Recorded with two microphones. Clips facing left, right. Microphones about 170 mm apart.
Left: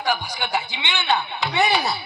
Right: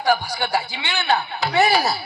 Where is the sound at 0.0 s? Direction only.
40° right (ahead or behind).